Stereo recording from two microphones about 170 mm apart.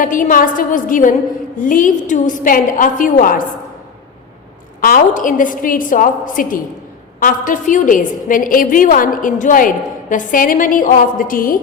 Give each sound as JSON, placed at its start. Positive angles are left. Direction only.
{"t": 0.0, "sound": "a woman's voice", "side_deg": 50}
{"t": 4.8, "sound": "a woman's voice", "side_deg": 50}